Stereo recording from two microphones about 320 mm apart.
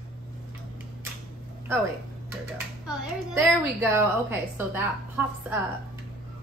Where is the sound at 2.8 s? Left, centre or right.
Centre.